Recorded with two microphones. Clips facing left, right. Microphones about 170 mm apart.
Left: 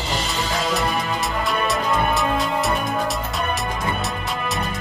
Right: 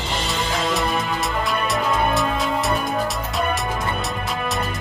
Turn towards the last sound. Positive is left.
turn(degrees=0)  # may be behind; listen again after turning